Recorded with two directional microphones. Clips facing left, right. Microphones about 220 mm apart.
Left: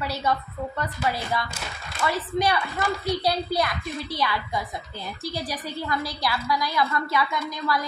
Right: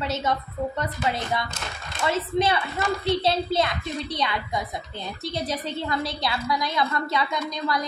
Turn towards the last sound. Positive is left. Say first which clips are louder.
# even
turn(degrees=-20)  # may be behind; listen again after turning